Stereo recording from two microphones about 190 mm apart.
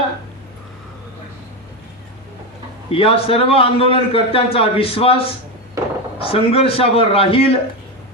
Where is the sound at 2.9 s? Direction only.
30° left (ahead or behind).